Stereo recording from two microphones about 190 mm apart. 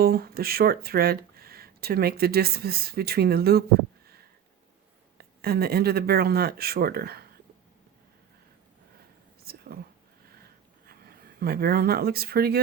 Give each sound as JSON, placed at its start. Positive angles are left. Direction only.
{"t": 0.0, "sound": "speech", "side_deg": -50}
{"t": 5.1, "sound": "speech", "side_deg": -55}
{"t": 9.4, "sound": "whispering", "side_deg": -55}
{"t": 10.4, "sound": "a sound", "side_deg": -55}